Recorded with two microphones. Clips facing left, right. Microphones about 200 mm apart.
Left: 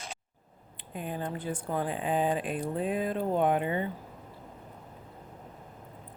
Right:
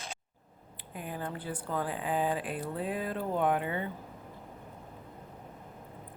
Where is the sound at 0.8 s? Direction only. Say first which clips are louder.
Left 3 dB; 25° left (ahead or behind).